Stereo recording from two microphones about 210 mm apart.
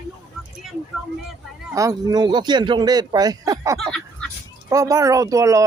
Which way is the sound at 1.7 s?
15° right (ahead or behind).